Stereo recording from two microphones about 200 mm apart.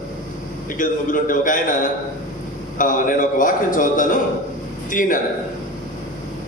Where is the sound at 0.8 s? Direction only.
40° left (ahead or behind).